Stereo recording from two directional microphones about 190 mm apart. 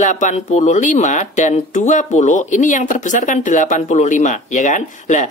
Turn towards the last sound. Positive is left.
turn(degrees=40)  # may be behind; listen again after turning